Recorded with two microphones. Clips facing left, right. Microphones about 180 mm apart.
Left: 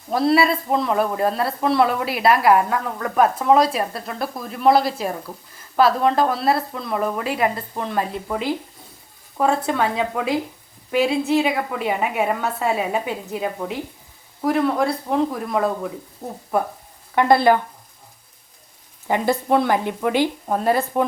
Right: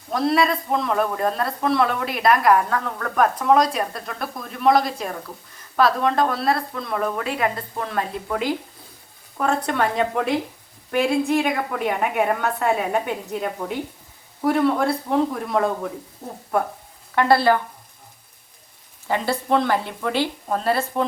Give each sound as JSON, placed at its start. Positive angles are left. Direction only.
{"t": 0.1, "sound": "a woman's voice", "side_deg": 5}
{"t": 17.2, "sound": "a woman's voice", "side_deg": 15}
{"t": 19.0, "sound": "a woman's voice", "side_deg": 15}